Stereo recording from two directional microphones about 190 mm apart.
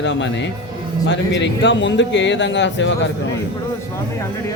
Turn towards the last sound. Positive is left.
turn(degrees=70)  # may be behind; listen again after turning